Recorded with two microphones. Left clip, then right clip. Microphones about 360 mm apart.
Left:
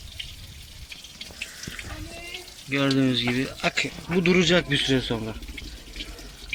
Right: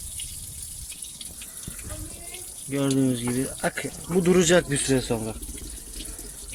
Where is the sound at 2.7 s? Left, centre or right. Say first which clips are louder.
Left 2 dB; centre.